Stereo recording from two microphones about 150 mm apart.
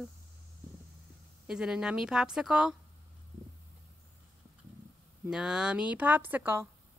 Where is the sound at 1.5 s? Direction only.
5° right (ahead or behind).